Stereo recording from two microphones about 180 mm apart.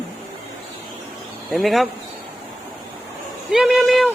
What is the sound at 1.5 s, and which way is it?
Speech, centre (ahead or behind).